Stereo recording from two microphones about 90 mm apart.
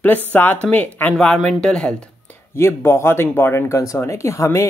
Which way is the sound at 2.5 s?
30° left (ahead or behind).